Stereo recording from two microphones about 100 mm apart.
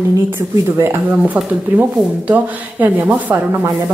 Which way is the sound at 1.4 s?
15° right (ahead or behind).